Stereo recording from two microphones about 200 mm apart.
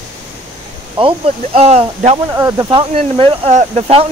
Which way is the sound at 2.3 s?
15° right (ahead or behind).